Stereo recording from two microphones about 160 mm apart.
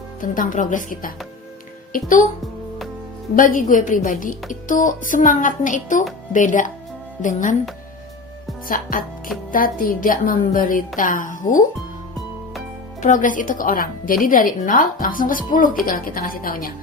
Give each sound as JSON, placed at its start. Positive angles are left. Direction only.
{"t": 0.2, "sound": "a woman's voice", "side_deg": 55}
{"t": 3.3, "sound": "a woman's voice", "side_deg": 55}
{"t": 8.6, "sound": "a woman's voice", "side_deg": 60}
{"t": 13.0, "sound": "a woman's voice", "side_deg": 55}